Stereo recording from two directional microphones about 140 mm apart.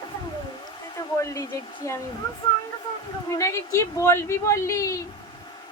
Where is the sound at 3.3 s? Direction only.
20° left (ahead or behind).